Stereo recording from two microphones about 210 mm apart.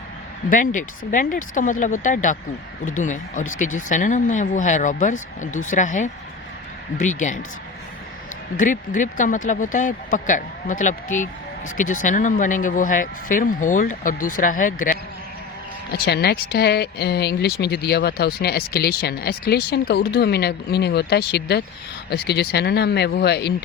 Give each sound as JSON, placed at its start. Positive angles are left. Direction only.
{"t": 0.5, "sound": "speech", "side_deg": 40}
{"t": 8.5, "sound": "speech", "side_deg": 40}
{"t": 15.9, "sound": "speech", "side_deg": 50}